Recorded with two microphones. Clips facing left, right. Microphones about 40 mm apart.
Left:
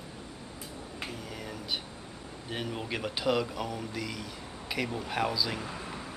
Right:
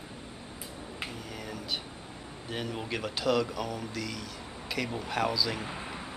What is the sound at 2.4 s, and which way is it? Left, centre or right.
Speech, centre.